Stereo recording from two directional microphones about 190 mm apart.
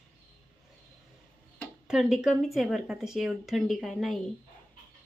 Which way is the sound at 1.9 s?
Centre (ahead or behind).